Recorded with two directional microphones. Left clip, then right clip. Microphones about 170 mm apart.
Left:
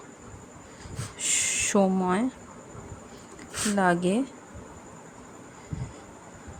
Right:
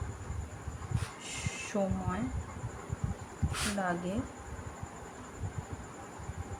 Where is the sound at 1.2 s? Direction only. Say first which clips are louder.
Left 16 dB; 65° left (ahead or behind).